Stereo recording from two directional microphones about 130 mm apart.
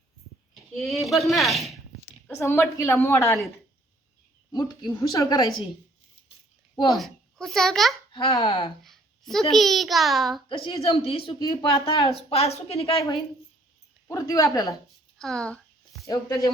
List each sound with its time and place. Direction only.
0.8 s speech: centre (ahead or behind)
2.3 s a woman's voice: 20° left (ahead or behind)
4.5 s a woman's voice: 35° left (ahead or behind)
6.9 s a child's voice: centre (ahead or behind)
8.1 s speech: 45° left (ahead or behind)
8.8 s a child's voice: centre (ahead or behind)
10.5 s a woman's voice: 45° left (ahead or behind)
11.3 s a woman's voice: 30° left (ahead or behind)
11.7 s a woman's voice: 40° left (ahead or behind)
14.1 s a woman's voice: 25° left (ahead or behind)
15.2 s a sound: 5° left (ahead or behind)
16.0 s a woman's voice: 25° left (ahead or behind)